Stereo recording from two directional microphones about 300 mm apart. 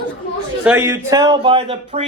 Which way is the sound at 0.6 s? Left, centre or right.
Centre.